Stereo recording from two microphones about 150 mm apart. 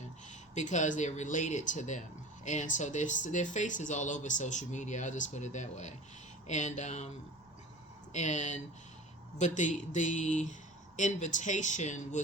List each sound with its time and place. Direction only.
0.3 s speech: 55° left (ahead or behind)
8.1 s speech: 55° left (ahead or behind)